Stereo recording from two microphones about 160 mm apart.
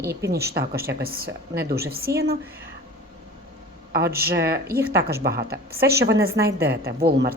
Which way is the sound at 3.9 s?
70° right (ahead or behind).